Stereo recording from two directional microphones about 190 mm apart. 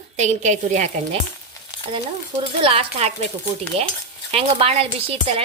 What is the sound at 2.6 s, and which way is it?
Speech, 30° right (ahead or behind).